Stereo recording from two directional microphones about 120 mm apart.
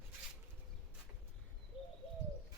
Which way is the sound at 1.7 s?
50° left (ahead or behind).